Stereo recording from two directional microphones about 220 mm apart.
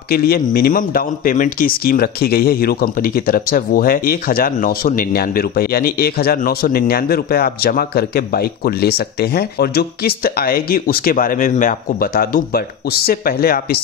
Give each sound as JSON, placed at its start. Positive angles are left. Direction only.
{"t": 0.1, "sound": "speech", "side_deg": 45}